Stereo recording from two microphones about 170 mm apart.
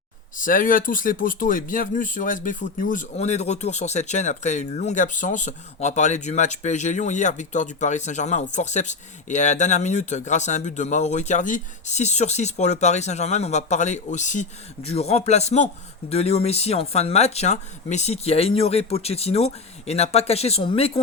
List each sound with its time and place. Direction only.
0.3 s speech: 50° left (ahead or behind); by 21.0 s 35° left (ahead or behind)